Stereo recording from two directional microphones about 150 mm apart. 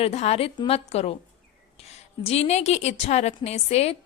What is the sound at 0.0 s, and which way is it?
A woman's voice, 45° left (ahead or behind).